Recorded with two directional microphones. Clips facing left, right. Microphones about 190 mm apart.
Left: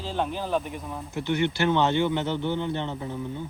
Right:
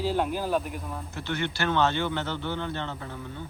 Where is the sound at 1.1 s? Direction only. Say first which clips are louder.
Left 7 dB; 15° left (ahead or behind).